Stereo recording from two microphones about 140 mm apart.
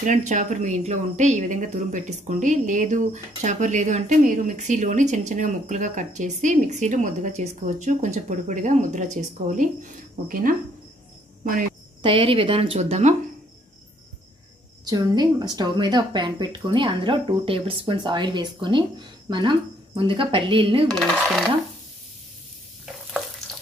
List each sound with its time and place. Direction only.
0.0 s speech: 60° right (ahead or behind); by 10.5 s 80° right
12.0 s a woman's voice: 40° right (ahead or behind)
14.9 s a woman's voice: 30° right (ahead or behind)
20.9 s dishes: centre (ahead or behind)